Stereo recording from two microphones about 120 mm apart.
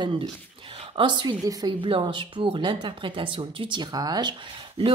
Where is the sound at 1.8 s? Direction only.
45° right (ahead or behind).